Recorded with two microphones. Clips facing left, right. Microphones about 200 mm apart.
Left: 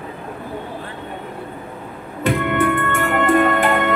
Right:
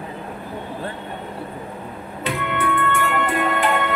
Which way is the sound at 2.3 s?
50° left (ahead or behind).